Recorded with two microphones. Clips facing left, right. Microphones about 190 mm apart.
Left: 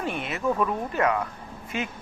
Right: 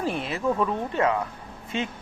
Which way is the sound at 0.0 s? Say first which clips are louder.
Right 1 dB; 30° right (ahead or behind).